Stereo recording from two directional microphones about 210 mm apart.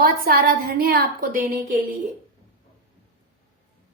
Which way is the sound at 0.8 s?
45° right (ahead or behind).